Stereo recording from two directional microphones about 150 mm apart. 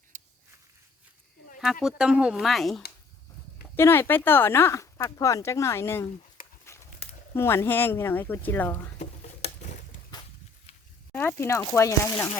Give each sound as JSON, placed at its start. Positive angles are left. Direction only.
{"t": 0.1, "sound": "walk", "side_deg": -55}
{"t": 1.6, "sound": "speech", "side_deg": 0}
{"t": 3.8, "sound": "speech", "side_deg": 15}
{"t": 9.0, "sound": "a sound", "side_deg": 45}
{"t": 10.1, "sound": "a sound", "side_deg": 30}
{"t": 11.1, "sound": "speech", "side_deg": 10}